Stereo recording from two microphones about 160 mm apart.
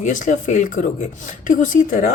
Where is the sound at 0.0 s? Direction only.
50° left (ahead or behind).